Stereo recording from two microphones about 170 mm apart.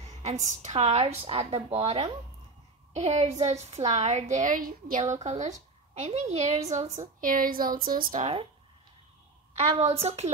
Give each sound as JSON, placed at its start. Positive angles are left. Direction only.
{"t": 0.0, "sound": "a woman's voice", "side_deg": -40}
{"t": 5.1, "sound": "a woman's voice", "side_deg": -45}
{"t": 9.6, "sound": "a woman's voice", "side_deg": -40}